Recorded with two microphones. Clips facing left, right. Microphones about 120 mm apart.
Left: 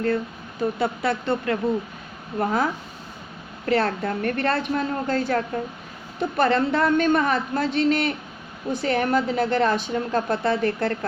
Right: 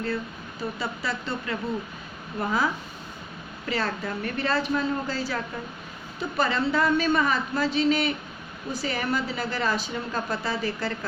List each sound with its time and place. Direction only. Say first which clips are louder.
0.6 s a woman's voice: left 8 dB; 60° left (ahead or behind)
3.7 s a woman's voice: left 7 dB; 65° left (ahead or behind)